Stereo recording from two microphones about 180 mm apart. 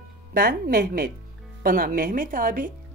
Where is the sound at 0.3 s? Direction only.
55° right (ahead or behind).